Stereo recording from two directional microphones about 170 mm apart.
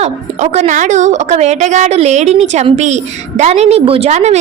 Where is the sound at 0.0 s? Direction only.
40° right (ahead or behind).